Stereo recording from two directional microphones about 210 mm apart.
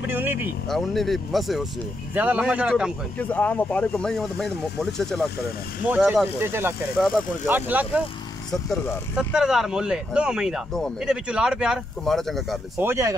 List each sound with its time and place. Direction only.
0.0 s speech: 10° right (ahead or behind)
0.7 s speech: centre (ahead or behind)
3.2 s speech: 5° left (ahead or behind)
12.7 s speech: 15° right (ahead or behind)